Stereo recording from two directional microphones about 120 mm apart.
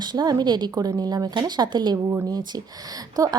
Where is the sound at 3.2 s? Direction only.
30° right (ahead or behind).